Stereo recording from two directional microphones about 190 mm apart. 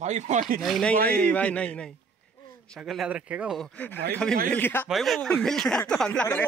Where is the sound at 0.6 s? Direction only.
Centre (ahead or behind).